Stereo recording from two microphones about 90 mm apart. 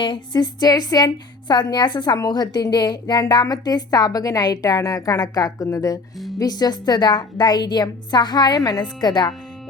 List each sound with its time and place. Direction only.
0.0 s a woman's voice: 60° left (ahead or behind)